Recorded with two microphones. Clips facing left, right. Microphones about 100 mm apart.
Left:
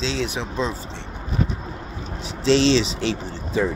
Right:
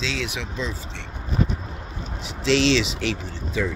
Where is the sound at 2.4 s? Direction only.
35° left (ahead or behind).